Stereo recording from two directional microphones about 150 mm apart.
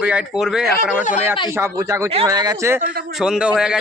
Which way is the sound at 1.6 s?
20° right (ahead or behind).